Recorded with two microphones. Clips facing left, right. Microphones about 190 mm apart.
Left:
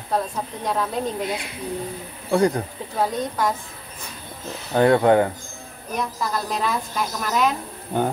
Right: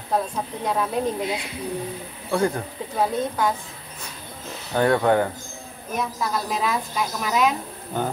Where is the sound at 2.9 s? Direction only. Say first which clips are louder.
Even; centre (ahead or behind).